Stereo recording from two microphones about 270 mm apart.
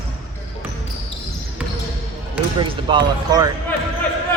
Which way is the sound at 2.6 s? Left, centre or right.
Centre.